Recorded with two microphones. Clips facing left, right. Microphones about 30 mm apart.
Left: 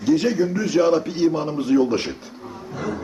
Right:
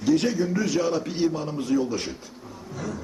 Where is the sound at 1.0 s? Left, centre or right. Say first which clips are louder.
Left 4 dB; centre.